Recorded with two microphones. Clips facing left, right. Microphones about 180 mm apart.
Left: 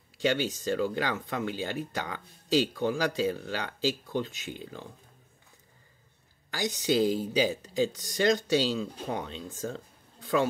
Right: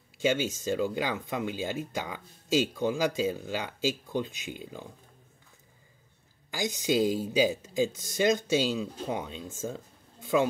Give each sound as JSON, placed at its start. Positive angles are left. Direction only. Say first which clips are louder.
{"t": 0.2, "sound": "speech", "louder": "even", "side_deg": -15}
{"t": 6.5, "sound": "speech", "louder": "even", "side_deg": -15}